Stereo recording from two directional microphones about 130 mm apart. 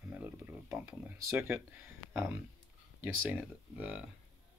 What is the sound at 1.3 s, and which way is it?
Speech, 15° right (ahead or behind).